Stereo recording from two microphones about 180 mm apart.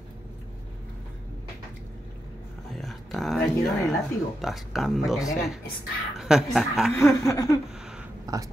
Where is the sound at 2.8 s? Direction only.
Centre (ahead or behind).